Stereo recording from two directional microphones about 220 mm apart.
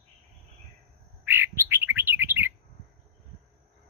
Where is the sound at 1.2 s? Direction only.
10° right (ahead or behind).